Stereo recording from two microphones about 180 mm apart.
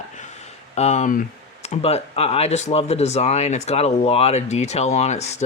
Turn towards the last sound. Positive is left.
turn(degrees=40)  # may be behind; listen again after turning